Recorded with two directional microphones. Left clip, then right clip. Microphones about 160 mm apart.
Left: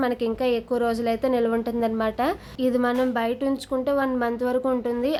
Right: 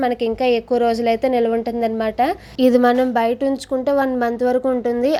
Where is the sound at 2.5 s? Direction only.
45° right (ahead or behind).